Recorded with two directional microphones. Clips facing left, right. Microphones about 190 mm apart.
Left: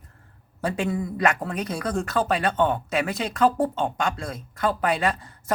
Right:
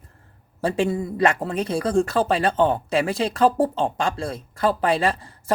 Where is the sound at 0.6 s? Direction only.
30° right (ahead or behind).